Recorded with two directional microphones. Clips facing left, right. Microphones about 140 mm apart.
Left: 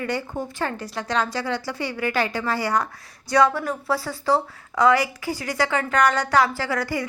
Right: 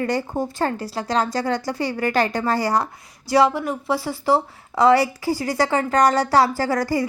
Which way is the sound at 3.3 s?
25° right (ahead or behind).